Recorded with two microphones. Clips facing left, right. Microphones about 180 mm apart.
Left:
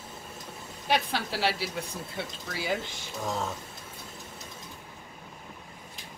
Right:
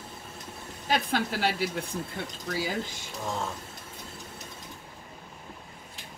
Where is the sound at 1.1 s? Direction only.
50° right (ahead or behind).